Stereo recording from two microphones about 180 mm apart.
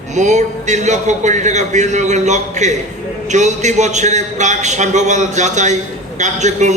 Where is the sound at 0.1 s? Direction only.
40° right (ahead or behind).